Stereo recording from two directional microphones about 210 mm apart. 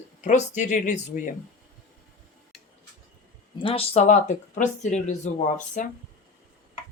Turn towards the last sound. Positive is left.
turn(degrees=35)  # may be behind; listen again after turning